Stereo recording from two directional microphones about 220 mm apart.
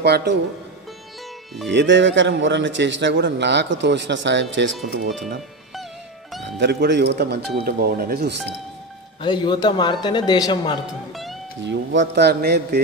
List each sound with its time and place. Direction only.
0.0 s a man's voice: 50° right (ahead or behind)
1.7 s a man's voice: 55° right (ahead or behind)
6.6 s a man's voice: 50° right (ahead or behind)
9.2 s speech: 20° left (ahead or behind)
11.6 s a man's voice: 55° right (ahead or behind)